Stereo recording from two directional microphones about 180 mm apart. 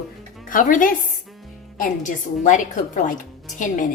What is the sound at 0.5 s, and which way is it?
Speech, 50° left (ahead or behind).